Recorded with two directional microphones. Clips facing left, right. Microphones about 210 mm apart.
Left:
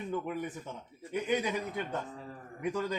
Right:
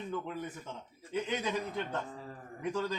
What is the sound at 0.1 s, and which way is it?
Speech, 15° left (ahead or behind).